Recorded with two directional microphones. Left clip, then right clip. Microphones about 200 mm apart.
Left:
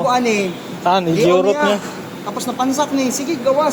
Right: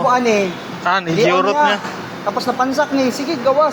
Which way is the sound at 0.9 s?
35° left (ahead or behind).